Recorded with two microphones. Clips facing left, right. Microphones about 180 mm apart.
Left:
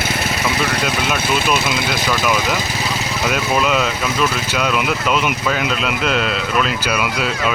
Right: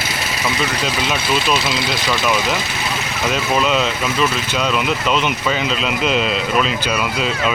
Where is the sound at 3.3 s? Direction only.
5° left (ahead or behind).